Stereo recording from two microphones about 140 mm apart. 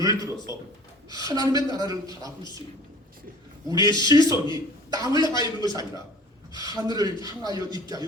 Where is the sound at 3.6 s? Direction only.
30° right (ahead or behind).